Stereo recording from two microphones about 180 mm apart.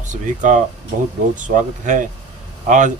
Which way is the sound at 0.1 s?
45° right (ahead or behind).